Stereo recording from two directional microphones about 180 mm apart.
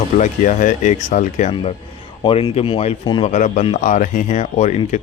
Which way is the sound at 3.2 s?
45° left (ahead or behind).